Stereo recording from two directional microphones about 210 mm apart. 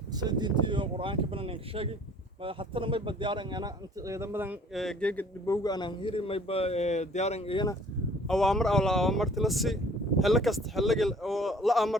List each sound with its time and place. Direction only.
0.1 s speech: 20° right (ahead or behind); by 5.5 s 5° left (ahead or behind)
5.6 s a man's voice: 20° left (ahead or behind)
8.3 s speech: centre (ahead or behind)